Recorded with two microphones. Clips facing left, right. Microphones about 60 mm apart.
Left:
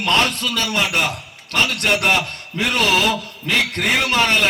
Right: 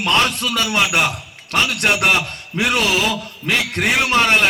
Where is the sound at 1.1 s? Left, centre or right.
Left.